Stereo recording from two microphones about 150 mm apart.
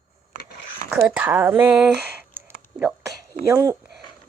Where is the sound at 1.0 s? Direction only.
10° right (ahead or behind).